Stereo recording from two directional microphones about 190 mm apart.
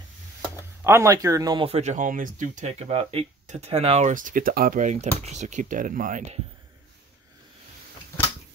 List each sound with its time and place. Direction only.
0.8 s speech: 15° right (ahead or behind); by 6.4 s 40° right (ahead or behind)